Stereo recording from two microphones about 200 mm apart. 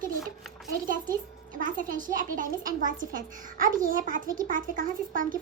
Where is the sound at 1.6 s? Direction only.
40° right (ahead or behind).